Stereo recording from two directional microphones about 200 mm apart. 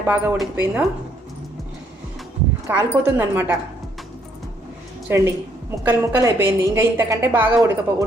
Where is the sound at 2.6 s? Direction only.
10° right (ahead or behind).